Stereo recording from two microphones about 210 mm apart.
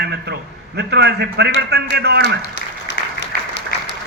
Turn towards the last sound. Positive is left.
turn(degrees=55)  # may be behind; listen again after turning